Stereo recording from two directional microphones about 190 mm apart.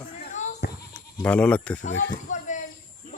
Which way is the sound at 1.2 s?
5° left (ahead or behind).